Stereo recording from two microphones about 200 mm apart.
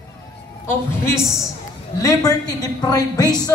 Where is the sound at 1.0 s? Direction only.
15° left (ahead or behind).